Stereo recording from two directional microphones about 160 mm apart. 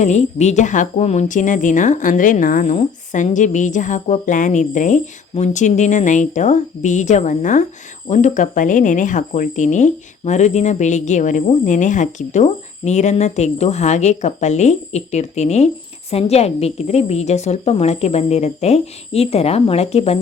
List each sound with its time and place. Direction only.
0.0 s speech: 45° left (ahead or behind)